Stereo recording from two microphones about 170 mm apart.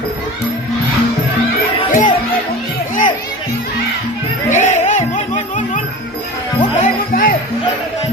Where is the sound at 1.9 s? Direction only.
50° left (ahead or behind).